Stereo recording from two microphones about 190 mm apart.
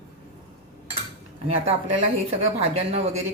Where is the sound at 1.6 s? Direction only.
35° right (ahead or behind).